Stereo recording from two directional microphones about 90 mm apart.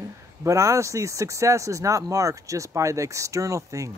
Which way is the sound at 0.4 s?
35° right (ahead or behind).